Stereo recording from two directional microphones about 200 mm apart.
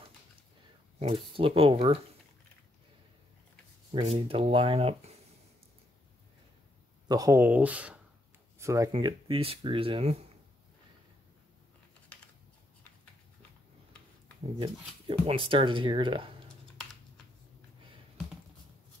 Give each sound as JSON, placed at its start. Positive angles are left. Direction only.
{"t": 1.0, "sound": "speech", "side_deg": -25}
{"t": 3.9, "sound": "speech", "side_deg": -25}
{"t": 7.1, "sound": "speech", "side_deg": -15}
{"t": 8.9, "sound": "speech", "side_deg": -25}
{"t": 14.6, "sound": "speech", "side_deg": -25}